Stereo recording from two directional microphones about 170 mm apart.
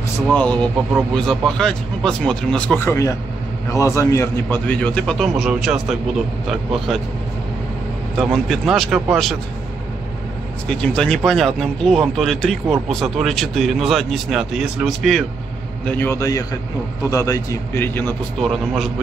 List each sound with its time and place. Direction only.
0.3 s a man's voice: 5° left (ahead or behind)
8.2 s speech: centre (ahead or behind)
10.7 s a man's voice: 5° left (ahead or behind)